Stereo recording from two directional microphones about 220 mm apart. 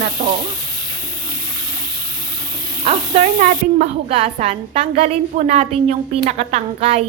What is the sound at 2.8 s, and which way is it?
A woman's voice, 30° right (ahead or behind).